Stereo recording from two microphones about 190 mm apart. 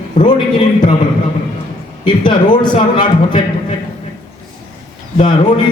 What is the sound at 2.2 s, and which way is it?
Speech, 25° left (ahead or behind).